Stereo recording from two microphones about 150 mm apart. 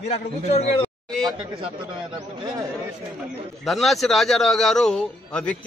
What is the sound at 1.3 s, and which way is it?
Speech, 40° right (ahead or behind).